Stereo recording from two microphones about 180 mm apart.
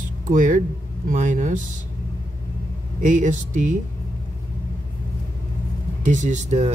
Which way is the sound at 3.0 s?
45° right (ahead or behind).